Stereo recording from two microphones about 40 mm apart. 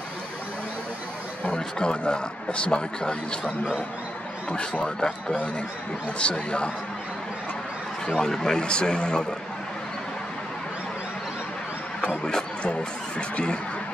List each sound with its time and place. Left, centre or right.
1.4 s a man's voice: left
4.8 s a man's voice: left
8.2 s a man's voice: centre
8.6 s a man's voice: left